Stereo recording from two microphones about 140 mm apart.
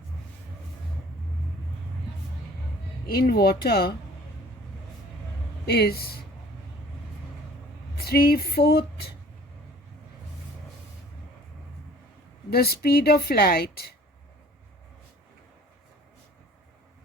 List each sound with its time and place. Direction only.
3.1 s a woman's voice: 90° left
5.7 s a woman's voice: 90° left
7.9 s a woman's voice: 90° left
12.5 s a woman's voice: 90° left